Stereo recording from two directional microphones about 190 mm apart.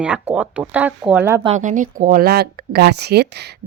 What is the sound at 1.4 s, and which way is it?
Speech, 40° right (ahead or behind).